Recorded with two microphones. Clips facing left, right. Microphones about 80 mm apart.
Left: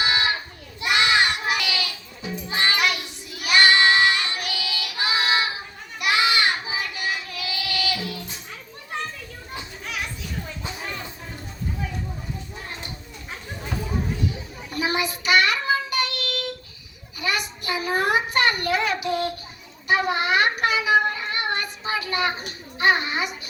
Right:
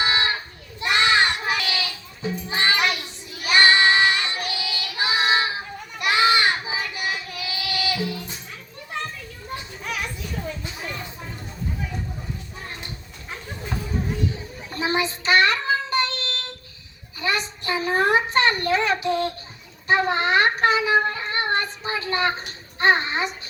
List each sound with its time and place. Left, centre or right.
0.0 s a sound: right
0.8 s child singing: right
14.7 s child singing: right
17.2 s a sound: right
19.0 s child singing: right
22.4 s babbling: right